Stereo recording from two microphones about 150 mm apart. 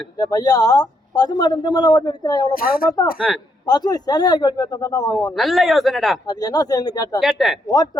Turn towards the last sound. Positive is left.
turn(degrees=25)  # may be behind; listen again after turning